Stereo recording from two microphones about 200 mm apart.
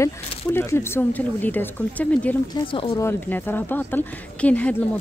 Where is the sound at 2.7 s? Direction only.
25° left (ahead or behind).